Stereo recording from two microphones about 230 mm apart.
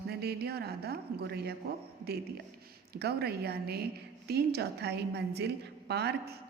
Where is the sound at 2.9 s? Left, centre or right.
Right.